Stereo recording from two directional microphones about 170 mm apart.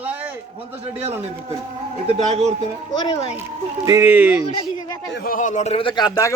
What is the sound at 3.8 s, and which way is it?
Speech, 15° right (ahead or behind).